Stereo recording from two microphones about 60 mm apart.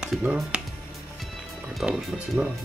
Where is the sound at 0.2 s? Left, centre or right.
Centre.